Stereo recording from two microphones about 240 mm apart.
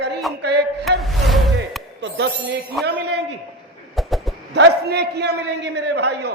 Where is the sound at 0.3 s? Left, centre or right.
Centre.